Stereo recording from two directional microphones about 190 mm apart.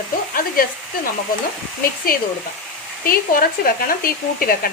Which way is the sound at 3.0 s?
50° left (ahead or behind).